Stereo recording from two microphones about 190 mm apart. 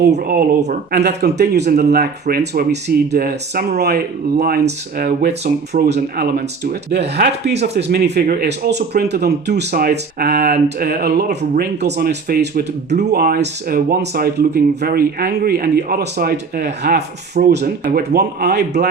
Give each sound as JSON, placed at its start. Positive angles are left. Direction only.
{"t": 0.1, "sound": "speech", "side_deg": -50}
{"t": 5.7, "sound": "speech", "side_deg": -60}
{"t": 17.4, "sound": "speech", "side_deg": -45}